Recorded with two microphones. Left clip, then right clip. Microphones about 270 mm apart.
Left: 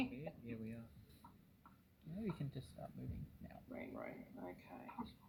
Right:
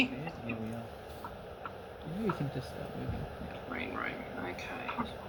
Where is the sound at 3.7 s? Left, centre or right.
Centre.